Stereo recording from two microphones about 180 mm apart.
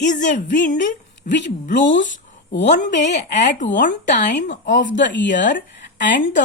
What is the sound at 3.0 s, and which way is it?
Speech, 70° left (ahead or behind).